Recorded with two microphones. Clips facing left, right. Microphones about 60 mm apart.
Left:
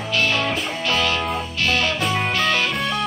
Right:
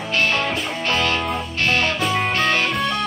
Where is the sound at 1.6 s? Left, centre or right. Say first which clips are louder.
Right 1 dB; right.